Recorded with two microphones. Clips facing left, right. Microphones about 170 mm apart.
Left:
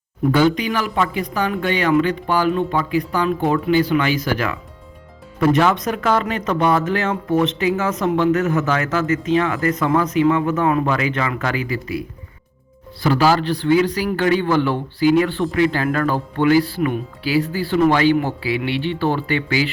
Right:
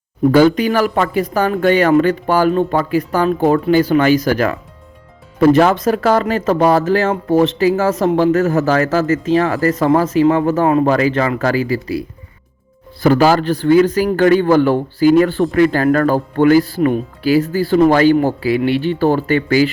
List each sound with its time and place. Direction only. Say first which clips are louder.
0.3 s speech: right 6 dB; 45° right (ahead or behind)
13.0 s speech: right 5 dB; 50° right (ahead or behind)